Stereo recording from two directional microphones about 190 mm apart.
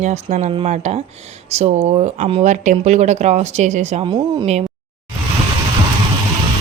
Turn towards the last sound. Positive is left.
turn(degrees=-35)  # may be behind; listen again after turning